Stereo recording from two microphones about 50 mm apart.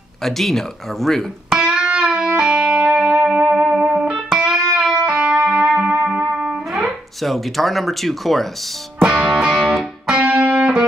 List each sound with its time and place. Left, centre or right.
0.2 s speech: centre
1.6 s music: centre
9.0 s music: centre